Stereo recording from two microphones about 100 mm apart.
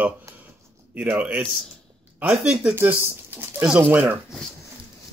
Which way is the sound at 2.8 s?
20° right (ahead or behind).